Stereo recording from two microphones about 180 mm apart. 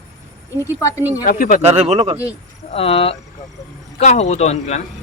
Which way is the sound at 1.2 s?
50° left (ahead or behind).